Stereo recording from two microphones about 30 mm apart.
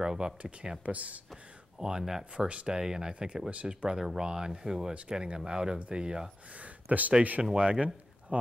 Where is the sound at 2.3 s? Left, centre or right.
Right.